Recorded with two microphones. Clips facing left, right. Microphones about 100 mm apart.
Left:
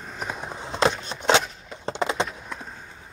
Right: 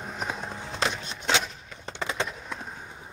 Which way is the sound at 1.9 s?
25° left (ahead or behind).